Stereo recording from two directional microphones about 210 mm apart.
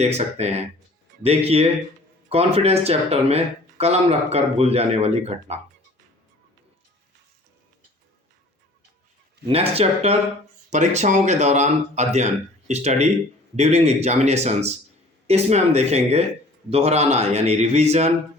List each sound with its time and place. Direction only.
0.0 s speech: 30° right (ahead or behind)
9.5 s speech: 30° right (ahead or behind)